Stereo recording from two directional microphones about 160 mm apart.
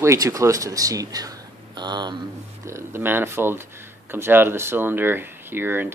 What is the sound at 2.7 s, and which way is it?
Speech, 15° right (ahead or behind).